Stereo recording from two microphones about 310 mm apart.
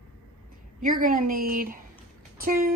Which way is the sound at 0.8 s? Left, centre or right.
Right.